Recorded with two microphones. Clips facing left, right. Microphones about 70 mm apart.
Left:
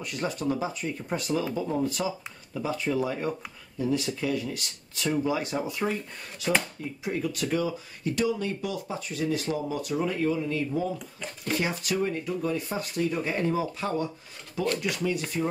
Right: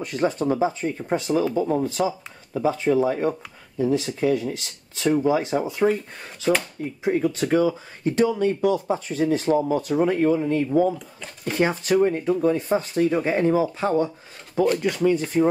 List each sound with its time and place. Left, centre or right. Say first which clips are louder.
0.0 s speech: right 7 dB; right
15.0 s speech: right 11 dB; right